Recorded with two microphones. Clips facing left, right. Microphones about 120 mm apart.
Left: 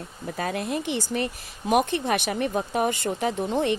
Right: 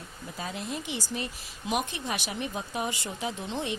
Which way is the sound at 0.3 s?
60° left (ahead or behind).